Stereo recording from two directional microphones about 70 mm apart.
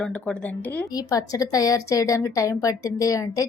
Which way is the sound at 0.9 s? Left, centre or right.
Left.